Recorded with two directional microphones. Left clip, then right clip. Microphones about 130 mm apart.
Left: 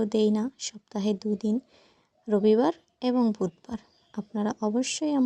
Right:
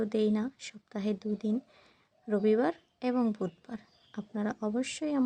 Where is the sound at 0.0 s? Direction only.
40° left (ahead or behind).